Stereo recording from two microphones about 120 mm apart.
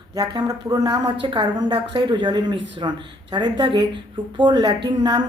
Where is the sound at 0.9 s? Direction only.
40° right (ahead or behind).